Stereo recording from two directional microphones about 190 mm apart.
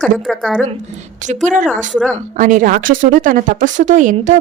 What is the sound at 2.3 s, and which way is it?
Speech, 45° right (ahead or behind).